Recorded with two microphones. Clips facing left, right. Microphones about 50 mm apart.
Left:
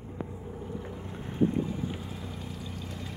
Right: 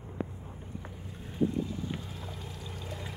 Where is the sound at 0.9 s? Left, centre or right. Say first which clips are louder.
Left 6 dB; left.